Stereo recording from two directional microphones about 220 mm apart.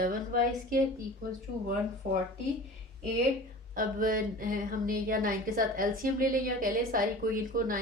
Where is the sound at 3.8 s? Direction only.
40° right (ahead or behind).